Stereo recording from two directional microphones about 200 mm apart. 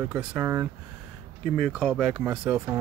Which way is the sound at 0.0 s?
10° right (ahead or behind).